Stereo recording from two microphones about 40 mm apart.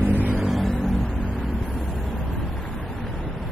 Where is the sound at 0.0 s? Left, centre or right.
Right.